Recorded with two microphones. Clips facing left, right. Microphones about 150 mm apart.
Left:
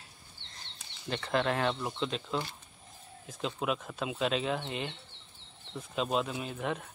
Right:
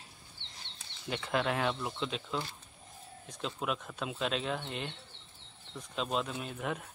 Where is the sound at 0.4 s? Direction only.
90° right.